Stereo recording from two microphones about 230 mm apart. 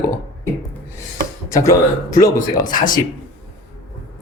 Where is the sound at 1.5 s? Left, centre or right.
Centre.